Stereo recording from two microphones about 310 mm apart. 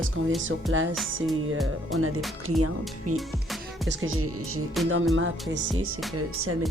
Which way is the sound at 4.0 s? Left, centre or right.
Right.